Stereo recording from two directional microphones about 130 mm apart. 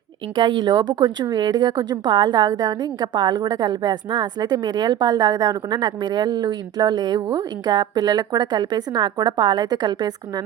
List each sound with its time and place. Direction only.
0.3 s speech: 35° right (ahead or behind)